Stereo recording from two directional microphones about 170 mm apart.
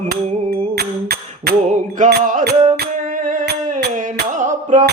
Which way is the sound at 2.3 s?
50° right (ahead or behind).